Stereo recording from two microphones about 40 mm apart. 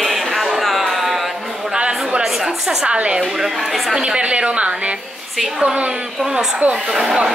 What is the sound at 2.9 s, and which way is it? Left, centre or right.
Speech, right.